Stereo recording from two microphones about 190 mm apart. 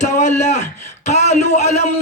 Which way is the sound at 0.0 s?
40° left (ahead or behind).